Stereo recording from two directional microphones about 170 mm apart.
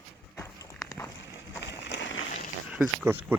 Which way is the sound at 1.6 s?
90° left.